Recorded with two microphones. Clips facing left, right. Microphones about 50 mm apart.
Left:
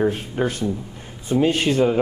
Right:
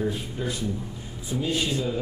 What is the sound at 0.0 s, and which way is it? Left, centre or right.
Speech, left.